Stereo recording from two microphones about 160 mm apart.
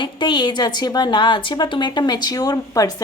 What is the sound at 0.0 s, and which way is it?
Speech, 30° left (ahead or behind).